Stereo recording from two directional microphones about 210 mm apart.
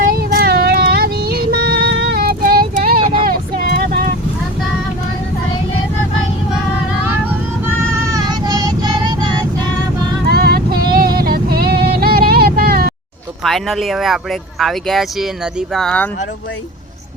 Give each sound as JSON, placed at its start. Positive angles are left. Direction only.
{"t": 0.0, "sound": "child singing", "side_deg": -45}
{"t": 7.0, "sound": "vehicle", "side_deg": -10}
{"t": 7.9, "sound": "child singing", "side_deg": -15}
{"t": 10.2, "sound": "vehicle", "side_deg": -50}
{"t": 10.9, "sound": "female singing", "side_deg": -45}
{"t": 13.4, "sound": "speech", "side_deg": 0}